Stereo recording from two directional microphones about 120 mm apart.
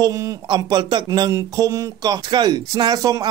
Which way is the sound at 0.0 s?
35° right (ahead or behind).